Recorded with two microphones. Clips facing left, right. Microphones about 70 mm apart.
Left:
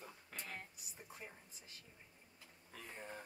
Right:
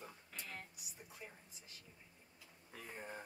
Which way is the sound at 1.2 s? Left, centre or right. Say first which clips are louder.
Even; left.